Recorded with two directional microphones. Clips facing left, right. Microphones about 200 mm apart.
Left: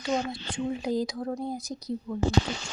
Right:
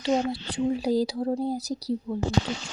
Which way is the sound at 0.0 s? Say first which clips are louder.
Right 4 dB; 35° right (ahead or behind).